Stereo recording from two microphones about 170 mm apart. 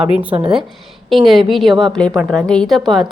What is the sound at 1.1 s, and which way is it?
A woman's voice, centre (ahead or behind).